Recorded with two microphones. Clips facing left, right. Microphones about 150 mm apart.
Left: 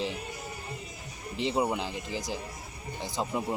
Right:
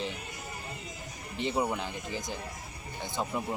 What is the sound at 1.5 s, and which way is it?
Speech, 20° left (ahead or behind).